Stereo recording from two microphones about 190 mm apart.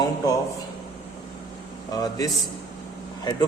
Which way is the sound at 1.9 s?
20° left (ahead or behind).